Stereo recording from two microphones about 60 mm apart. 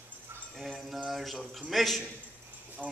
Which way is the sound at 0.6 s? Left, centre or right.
Centre.